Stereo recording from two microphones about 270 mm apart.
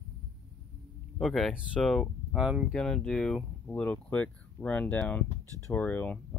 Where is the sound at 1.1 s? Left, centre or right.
Centre.